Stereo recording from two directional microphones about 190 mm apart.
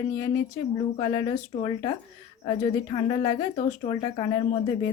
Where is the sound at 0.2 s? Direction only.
15° left (ahead or behind).